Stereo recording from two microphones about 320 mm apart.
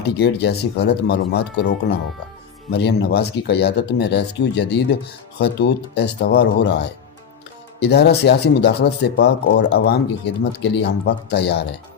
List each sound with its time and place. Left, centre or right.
0.0 s speech: left
2.7 s speech: left